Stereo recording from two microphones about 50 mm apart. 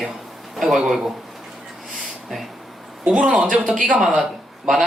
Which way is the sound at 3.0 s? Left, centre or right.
Centre.